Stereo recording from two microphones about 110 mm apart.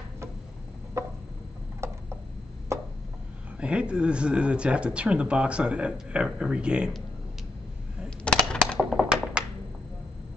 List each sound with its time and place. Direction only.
1.0 s a sound: 25° right (ahead or behind)
1.8 s tick-tock: 25° right (ahead or behind)
2.7 s chopping: 25° right (ahead or behind)
3.5 s speech: 10° right (ahead or behind)
8.2 s typing: 10° left (ahead or behind)
9.4 s a sound: 10° right (ahead or behind)